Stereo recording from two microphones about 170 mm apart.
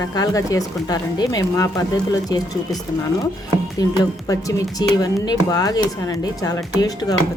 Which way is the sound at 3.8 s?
20° left (ahead or behind).